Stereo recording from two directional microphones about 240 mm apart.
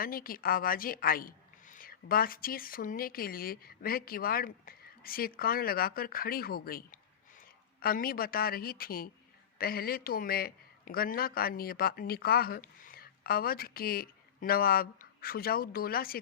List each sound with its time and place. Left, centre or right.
0.0 s a man's voice: left